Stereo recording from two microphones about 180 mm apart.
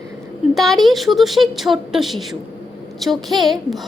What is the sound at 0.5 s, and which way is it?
A woman's voice, centre (ahead or behind).